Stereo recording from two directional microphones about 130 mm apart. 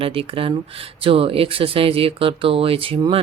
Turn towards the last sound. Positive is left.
turn(degrees=-45)  # may be behind; listen again after turning